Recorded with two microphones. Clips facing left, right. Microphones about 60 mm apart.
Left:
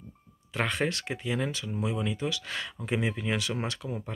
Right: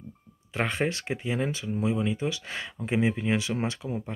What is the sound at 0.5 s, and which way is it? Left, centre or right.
Speech, centre.